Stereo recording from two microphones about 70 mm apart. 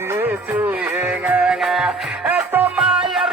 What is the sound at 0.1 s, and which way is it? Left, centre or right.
Music, right.